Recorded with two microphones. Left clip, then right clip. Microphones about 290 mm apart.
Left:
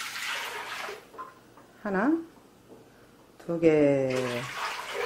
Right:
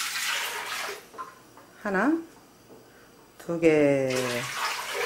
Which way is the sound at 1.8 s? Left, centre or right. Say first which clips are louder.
Right 2 dB; centre.